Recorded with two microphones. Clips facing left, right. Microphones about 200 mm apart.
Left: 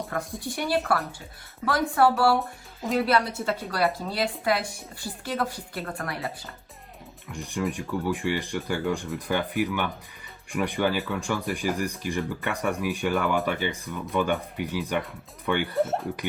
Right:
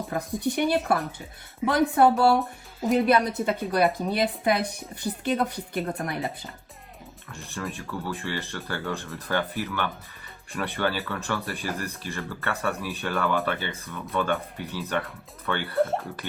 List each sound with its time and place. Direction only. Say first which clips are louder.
0.3 s a woman's voice: right 4 dB; 20° right (ahead or behind)
7.3 s speech: left 6 dB; 15° left (ahead or behind)
15.7 s speech: right 1 dB; centre (ahead or behind)